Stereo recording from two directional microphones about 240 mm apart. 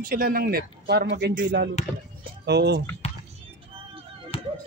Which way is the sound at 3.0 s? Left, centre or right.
Left.